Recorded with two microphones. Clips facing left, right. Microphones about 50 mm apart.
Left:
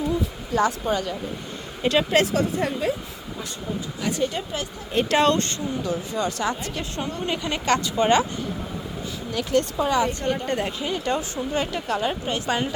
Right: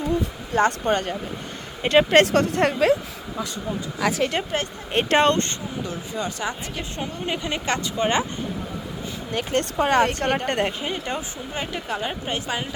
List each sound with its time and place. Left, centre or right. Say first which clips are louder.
0.5 s speech: right 2 dB; right
1.8 s speech: right 4 dB; right
2.2 s speech: right 3 dB; right
4.2 s speech: right 2 dB; right
4.5 s a woman's voice: right 1 dB; right; by 8.2 s centre
9.3 s speech: left 1 dB; right
10.7 s speech: left 2 dB; right; by 12.3 s centre